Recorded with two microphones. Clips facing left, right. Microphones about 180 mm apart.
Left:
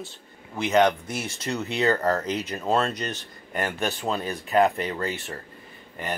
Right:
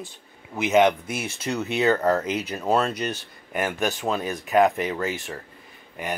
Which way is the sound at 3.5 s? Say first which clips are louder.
Right 2 dB; 5° right (ahead or behind).